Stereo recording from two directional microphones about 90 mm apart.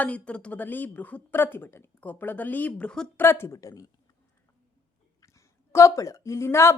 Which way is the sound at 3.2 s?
25° left (ahead or behind).